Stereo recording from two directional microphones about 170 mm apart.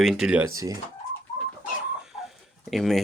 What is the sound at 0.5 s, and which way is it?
Speech, 20° right (ahead or behind).